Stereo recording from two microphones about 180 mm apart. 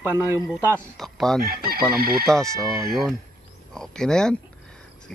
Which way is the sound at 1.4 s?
55° right (ahead or behind).